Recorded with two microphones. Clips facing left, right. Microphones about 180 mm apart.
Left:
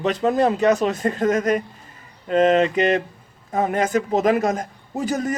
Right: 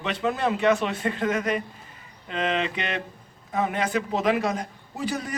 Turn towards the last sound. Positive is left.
turn(degrees=45)  # may be behind; listen again after turning